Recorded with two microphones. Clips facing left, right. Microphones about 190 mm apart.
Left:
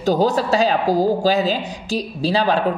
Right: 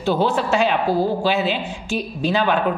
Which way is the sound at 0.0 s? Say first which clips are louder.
Left 2 dB; 40° left (ahead or behind).